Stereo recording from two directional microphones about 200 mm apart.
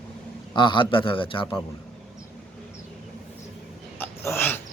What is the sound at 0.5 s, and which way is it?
A man's voice, 25° left (ahead or behind).